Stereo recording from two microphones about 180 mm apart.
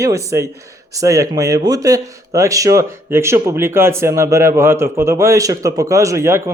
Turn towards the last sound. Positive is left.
turn(degrees=-15)  # may be behind; listen again after turning